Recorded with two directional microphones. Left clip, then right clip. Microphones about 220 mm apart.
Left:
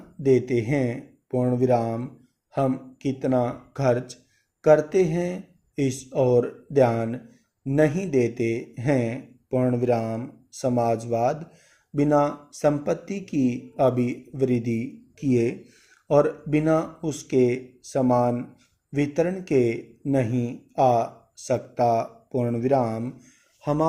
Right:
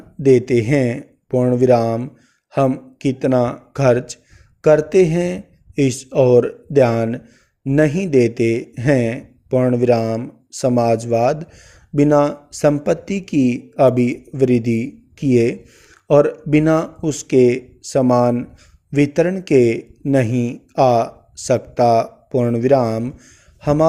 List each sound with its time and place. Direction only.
0.2 s a man's voice: 45° right (ahead or behind)